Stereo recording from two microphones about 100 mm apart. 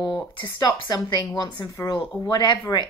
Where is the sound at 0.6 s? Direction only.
45° left (ahead or behind).